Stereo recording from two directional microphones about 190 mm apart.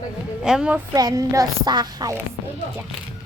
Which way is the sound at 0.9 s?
20° right (ahead or behind).